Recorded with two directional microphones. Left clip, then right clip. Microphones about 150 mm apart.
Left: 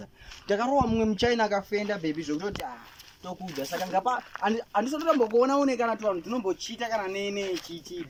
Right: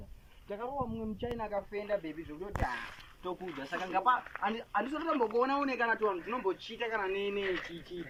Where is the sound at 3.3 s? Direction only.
30° left (ahead or behind).